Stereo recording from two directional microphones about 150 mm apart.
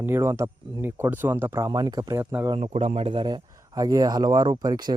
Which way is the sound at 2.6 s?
45° right (ahead or behind).